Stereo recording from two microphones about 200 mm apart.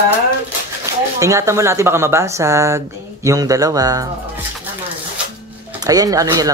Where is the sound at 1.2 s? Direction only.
15° right (ahead or behind).